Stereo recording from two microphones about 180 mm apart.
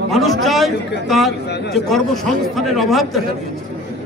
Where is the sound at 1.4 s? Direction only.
70° left (ahead or behind).